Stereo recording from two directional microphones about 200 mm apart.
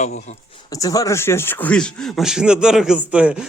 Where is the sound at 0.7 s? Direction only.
15° left (ahead or behind).